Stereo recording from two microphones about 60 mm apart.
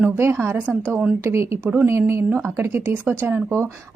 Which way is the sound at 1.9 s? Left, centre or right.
Right.